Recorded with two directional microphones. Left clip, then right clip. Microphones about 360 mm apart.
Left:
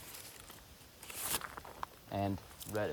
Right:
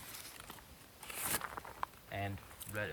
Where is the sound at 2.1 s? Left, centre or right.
Left.